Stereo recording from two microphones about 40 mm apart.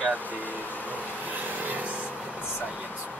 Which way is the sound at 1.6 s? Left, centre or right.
Right.